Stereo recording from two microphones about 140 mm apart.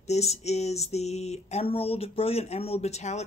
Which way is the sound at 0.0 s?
50° left (ahead or behind).